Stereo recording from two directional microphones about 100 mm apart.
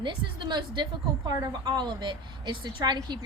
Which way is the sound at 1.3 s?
40° right (ahead or behind).